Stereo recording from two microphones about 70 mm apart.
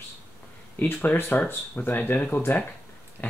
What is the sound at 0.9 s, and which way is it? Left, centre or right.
Speech, left.